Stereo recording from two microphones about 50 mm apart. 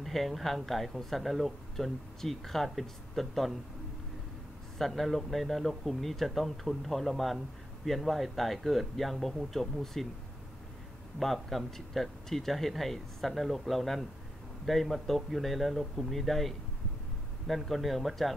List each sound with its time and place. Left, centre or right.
0.0 s speech: centre
4.7 s speech: centre
11.1 s speech: centre